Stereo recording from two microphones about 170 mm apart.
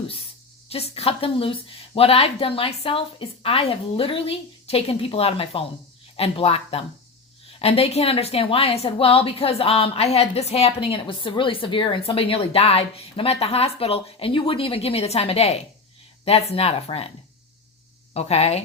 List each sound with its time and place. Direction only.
0.7 s a woman's voice: 35° left (ahead or behind)
18.1 s a woman's voice: 40° left (ahead or behind)